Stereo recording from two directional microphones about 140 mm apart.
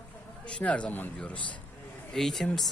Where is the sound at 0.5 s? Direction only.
10° left (ahead or behind).